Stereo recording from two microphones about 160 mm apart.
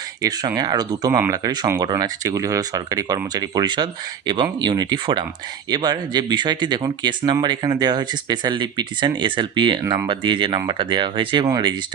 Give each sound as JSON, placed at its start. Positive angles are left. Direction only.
{"t": 0.2, "sound": "speech", "side_deg": -25}
{"t": 9.8, "sound": "speech", "side_deg": -20}
{"t": 10.1, "sound": "speech", "side_deg": -30}